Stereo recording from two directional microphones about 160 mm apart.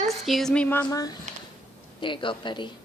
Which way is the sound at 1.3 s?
50° right (ahead or behind).